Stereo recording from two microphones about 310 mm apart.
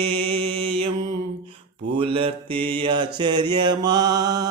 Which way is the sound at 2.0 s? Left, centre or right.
Centre.